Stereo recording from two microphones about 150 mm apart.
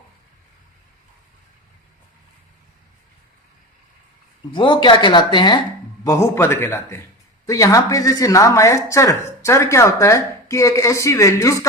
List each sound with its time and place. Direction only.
4.5 s speech: 30° left (ahead or behind)
6.1 s a man's voice: 20° left (ahead or behind)